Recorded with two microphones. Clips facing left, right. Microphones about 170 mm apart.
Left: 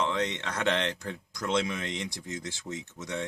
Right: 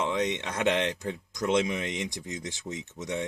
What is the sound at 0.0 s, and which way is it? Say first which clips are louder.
Speech: right 1 dB; 15° right (ahead or behind).